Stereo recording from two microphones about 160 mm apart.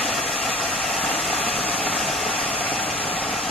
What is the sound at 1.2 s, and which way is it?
Vehicle, centre (ahead or behind).